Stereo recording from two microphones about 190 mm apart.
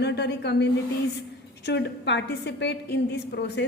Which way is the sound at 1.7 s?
70° left (ahead or behind).